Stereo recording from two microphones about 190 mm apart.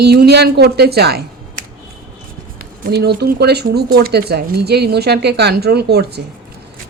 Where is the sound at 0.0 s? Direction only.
60° right (ahead or behind).